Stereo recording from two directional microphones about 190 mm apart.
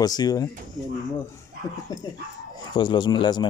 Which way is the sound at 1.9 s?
20° left (ahead or behind).